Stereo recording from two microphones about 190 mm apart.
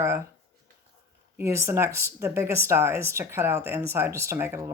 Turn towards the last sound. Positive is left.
turn(degrees=-15)  # may be behind; listen again after turning